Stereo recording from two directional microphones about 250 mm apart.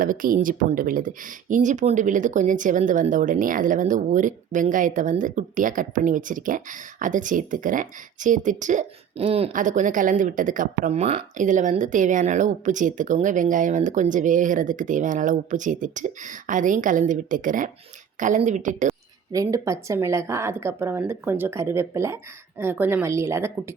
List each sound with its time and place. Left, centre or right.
0.0 s a woman's voice: right
19.3 s speech: centre